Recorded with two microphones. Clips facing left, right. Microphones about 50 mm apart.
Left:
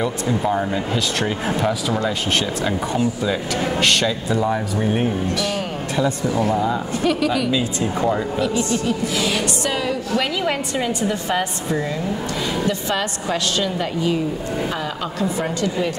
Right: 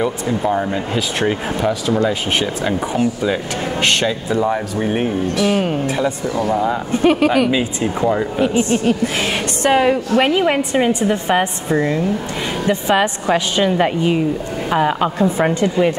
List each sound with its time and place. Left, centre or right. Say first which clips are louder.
0.0 s speech: right 2 dB; centre
2.0 s speech: right 3 dB; centre
7.0 s a woman's voice: right 7 dB; right
8.8 s a woman's voice: right 4 dB; right
10.4 s a woman's voice: right 6 dB; right